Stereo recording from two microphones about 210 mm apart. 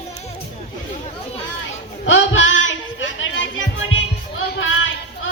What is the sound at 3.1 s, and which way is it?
Music, 65° left (ahead or behind).